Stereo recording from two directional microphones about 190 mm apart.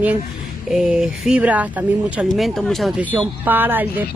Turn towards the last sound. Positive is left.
turn(degrees=-10)  # may be behind; listen again after turning